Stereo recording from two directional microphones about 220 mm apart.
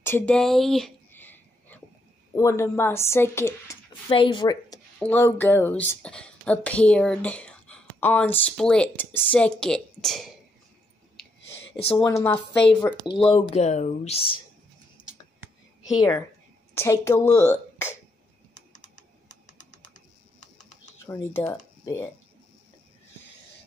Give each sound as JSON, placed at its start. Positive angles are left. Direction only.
{"t": 0.0, "sound": "a sound", "side_deg": 10}
{"t": 2.3, "sound": "a woman's voice", "side_deg": 15}
{"t": 4.1, "sound": "speech", "side_deg": 20}
{"t": 4.9, "sound": "speech", "side_deg": 10}
{"t": 11.8, "sound": "a woman's voice", "side_deg": 15}
{"t": 13.3, "sound": "speech", "side_deg": 25}
{"t": 16.7, "sound": "a woman's voice", "side_deg": 10}
{"t": 18.5, "sound": "typing", "side_deg": 35}
{"t": 21.1, "sound": "speech", "side_deg": 10}